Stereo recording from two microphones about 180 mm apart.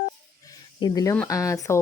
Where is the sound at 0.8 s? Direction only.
20° left (ahead or behind).